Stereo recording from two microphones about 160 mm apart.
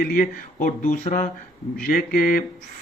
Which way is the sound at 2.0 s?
60° left (ahead or behind).